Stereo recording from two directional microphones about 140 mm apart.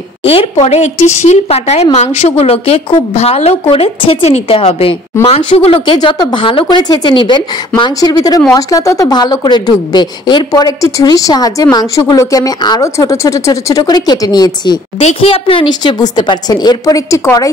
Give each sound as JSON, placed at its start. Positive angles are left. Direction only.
{"t": 0.2, "sound": "a woman's voice", "side_deg": 45}
{"t": 15.0, "sound": "speech", "side_deg": 45}